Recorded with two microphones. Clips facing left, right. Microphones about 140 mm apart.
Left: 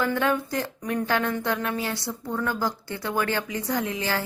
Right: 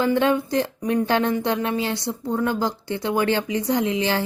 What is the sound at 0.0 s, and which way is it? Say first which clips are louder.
A woman's voice: right 5 dB; 25° right (ahead or behind).